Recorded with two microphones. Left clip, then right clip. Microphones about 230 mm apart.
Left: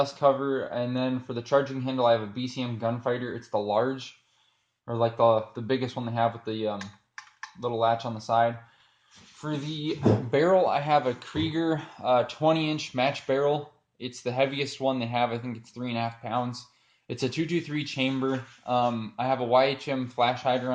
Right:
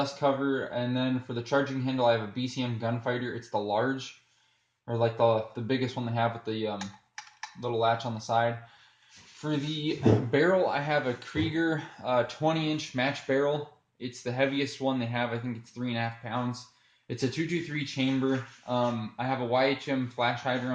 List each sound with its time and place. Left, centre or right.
0.0 s speech: left
10.3 s speech: left